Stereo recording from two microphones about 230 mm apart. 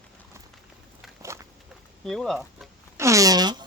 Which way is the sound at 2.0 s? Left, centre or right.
Centre.